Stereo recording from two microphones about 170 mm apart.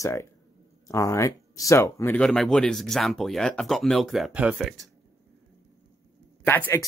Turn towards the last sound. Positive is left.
turn(degrees=15)  # may be behind; listen again after turning